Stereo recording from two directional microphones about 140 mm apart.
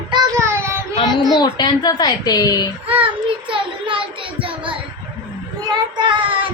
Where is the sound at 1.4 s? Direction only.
30° left (ahead or behind).